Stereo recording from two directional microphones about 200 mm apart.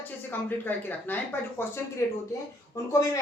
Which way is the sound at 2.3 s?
15° left (ahead or behind).